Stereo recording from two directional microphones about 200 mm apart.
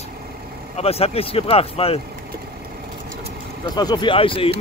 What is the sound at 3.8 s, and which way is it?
Speech, 20° left (ahead or behind).